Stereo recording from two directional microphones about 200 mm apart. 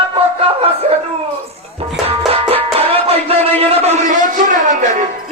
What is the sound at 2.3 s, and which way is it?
Music, 30° right (ahead or behind).